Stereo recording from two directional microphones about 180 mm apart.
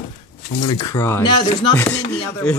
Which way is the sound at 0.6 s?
20° left (ahead or behind).